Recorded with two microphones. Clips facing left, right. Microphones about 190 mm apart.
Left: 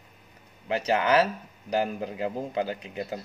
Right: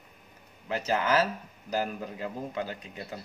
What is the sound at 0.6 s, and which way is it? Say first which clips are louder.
A man's voice: left 3 dB; 25° left (ahead or behind).